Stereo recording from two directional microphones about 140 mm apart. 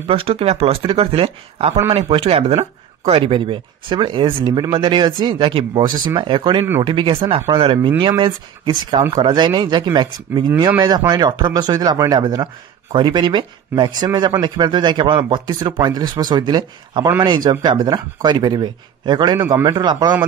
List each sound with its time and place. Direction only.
0.0 s speech: 40° right (ahead or behind)